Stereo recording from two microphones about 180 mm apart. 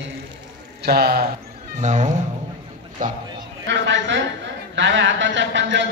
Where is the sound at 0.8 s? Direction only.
55° right (ahead or behind).